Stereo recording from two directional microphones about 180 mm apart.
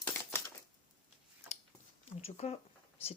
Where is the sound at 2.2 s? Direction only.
35° left (ahead or behind).